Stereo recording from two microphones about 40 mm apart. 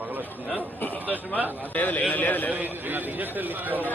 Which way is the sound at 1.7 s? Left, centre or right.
Left.